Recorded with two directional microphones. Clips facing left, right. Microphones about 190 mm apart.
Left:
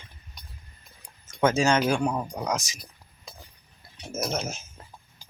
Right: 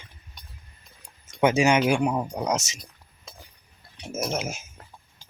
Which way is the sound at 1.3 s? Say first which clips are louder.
Right 2 dB; 15° right (ahead or behind).